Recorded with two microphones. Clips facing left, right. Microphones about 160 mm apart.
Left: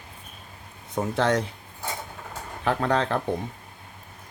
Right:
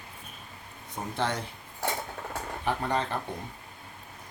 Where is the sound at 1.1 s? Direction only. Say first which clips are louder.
Left 7 dB; 90° left.